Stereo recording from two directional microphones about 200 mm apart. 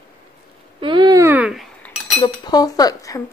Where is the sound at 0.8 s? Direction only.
20° right (ahead or behind); by 1.6 s 5° right (ahead or behind).